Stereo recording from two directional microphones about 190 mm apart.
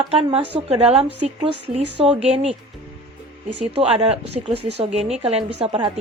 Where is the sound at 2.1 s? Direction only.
35° right (ahead or behind).